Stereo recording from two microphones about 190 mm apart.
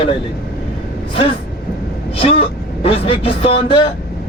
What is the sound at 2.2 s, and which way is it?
A man's voice, 30° left (ahead or behind).